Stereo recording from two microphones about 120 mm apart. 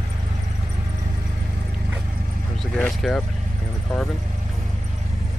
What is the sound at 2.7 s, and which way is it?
Speech, 5° left (ahead or behind).